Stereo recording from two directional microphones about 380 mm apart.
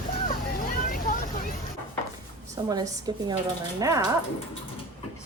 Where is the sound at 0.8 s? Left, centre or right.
Left.